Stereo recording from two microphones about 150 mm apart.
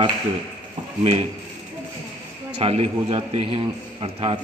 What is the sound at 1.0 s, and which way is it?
Speech, 45° right (ahead or behind).